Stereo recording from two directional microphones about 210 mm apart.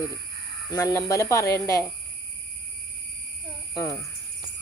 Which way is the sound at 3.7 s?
15° left (ahead or behind).